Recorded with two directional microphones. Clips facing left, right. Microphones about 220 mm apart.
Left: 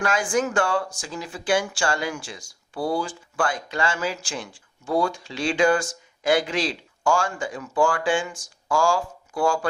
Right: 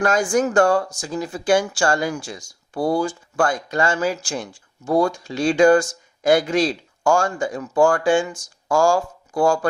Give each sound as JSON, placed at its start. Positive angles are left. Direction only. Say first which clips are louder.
{"t": 0.0, "sound": "speech", "louder": "right 5 dB", "side_deg": -40}